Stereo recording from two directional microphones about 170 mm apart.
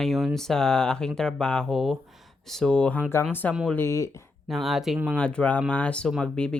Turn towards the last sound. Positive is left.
turn(degrees=5)  # may be behind; listen again after turning